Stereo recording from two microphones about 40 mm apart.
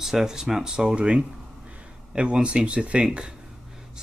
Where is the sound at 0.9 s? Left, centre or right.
Right.